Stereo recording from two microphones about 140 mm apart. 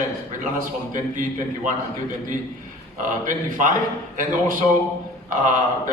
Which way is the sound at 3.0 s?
70° right (ahead or behind).